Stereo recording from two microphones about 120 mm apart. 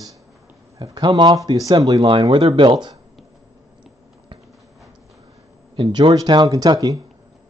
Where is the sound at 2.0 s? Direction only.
45° right (ahead or behind).